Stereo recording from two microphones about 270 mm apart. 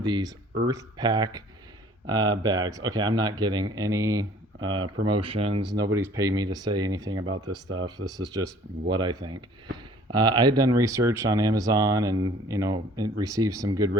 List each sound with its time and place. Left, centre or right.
0.0 s speech: centre